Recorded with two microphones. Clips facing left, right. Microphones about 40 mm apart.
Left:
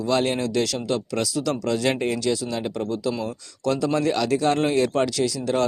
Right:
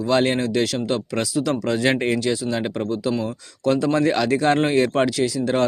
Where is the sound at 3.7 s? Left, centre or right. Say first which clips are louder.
Right 3 dB; right.